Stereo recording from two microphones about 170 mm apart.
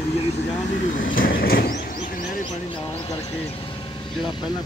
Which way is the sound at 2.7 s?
30° left (ahead or behind).